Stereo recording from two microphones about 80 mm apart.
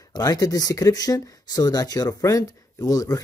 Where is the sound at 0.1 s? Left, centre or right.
Left.